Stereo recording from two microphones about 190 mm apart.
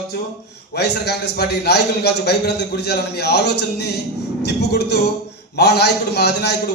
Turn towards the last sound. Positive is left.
turn(degrees=60)  # may be behind; listen again after turning